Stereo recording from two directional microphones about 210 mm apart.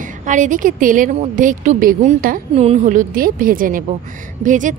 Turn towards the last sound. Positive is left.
turn(degrees=-35)  # may be behind; listen again after turning